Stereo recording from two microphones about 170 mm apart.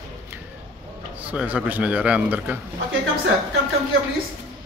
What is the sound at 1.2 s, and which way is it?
Speech, 5° right (ahead or behind).